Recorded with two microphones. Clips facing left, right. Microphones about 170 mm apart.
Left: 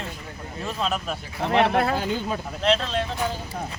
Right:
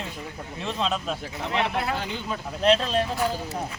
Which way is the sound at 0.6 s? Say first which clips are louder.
Even; 5° left (ahead or behind).